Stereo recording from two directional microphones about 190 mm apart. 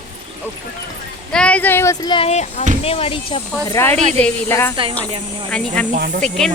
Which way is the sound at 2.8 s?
30° left (ahead or behind).